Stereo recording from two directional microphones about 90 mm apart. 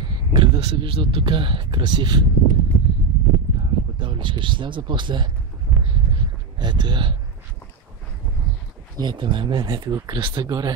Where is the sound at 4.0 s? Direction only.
65° right (ahead or behind).